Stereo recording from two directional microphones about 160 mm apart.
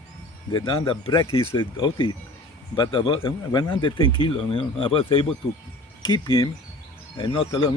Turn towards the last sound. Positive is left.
turn(degrees=35)  # may be behind; listen again after turning